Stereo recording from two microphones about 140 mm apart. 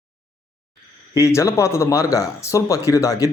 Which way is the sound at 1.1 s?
20° left (ahead or behind).